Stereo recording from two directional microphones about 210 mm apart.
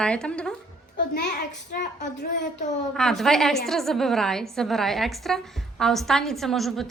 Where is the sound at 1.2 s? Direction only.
50° left (ahead or behind).